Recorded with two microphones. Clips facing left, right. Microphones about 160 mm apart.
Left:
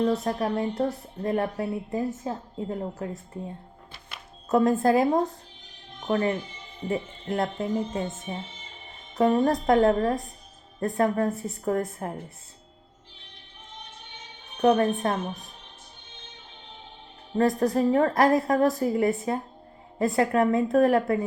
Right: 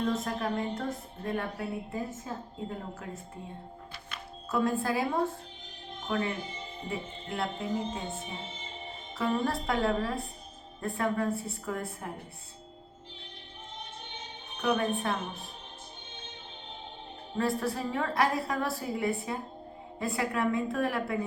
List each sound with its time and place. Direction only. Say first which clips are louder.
0.0 s speech: left 6 dB; 35° left (ahead or behind)
4.4 s a woman's voice: left 8 dB; 40° left (ahead or behind)
9.1 s a woman's voice: left 8 dB; 40° left (ahead or behind)
14.6 s speech: left 8 dB; 40° left (ahead or behind)
17.3 s a woman's voice: left 8 dB; 40° left (ahead or behind)